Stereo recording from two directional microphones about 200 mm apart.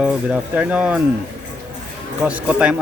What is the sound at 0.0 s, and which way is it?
Speech, 5° right (ahead or behind).